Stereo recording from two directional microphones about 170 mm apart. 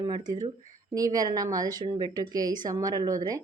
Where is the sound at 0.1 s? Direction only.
25° right (ahead or behind).